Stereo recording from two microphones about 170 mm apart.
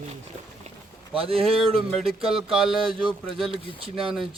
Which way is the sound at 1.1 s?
35° right (ahead or behind).